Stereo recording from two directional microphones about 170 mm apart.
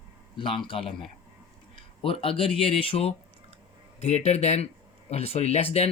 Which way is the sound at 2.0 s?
30° left (ahead or behind).